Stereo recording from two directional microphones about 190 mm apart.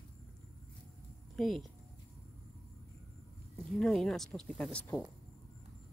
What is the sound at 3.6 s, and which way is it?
Speech, centre (ahead or behind).